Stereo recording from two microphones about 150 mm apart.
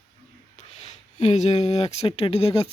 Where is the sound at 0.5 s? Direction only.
45° left (ahead or behind).